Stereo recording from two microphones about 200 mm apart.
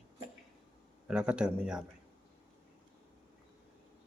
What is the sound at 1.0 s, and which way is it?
Speech, 5° right (ahead or behind).